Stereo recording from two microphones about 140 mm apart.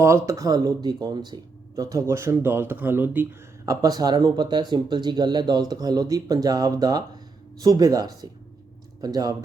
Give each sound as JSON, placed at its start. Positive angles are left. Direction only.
{"t": 0.0, "sound": "speech", "side_deg": -20}
{"t": 3.7, "sound": "speech", "side_deg": -25}